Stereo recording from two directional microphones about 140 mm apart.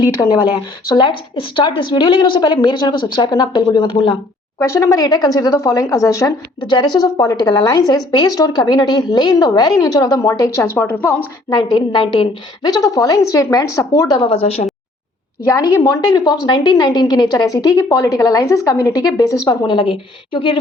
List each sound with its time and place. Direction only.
0.2 s a woman's voice: 20° left (ahead or behind)
0.9 s a woman's voice: 35° left (ahead or behind)
4.6 s a woman's voice: 20° left (ahead or behind)
10.8 s a woman's voice: 15° left (ahead or behind)
11.4 s a woman's voice: 30° left (ahead or behind)
14.2 s a woman's voice: 40° left (ahead or behind)
15.4 s a woman's voice: 25° left (ahead or behind); by 20.6 s 40° left (ahead or behind)